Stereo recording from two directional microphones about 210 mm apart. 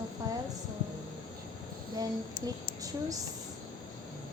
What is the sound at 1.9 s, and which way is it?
Speech, 15° right (ahead or behind).